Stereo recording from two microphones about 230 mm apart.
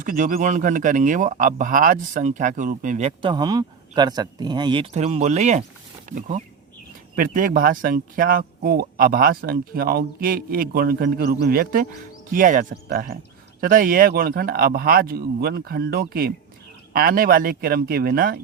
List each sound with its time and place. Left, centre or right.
0.0 s speech: right